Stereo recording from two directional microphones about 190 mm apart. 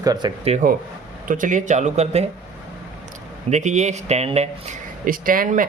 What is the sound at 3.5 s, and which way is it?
Speech, 40° right (ahead or behind).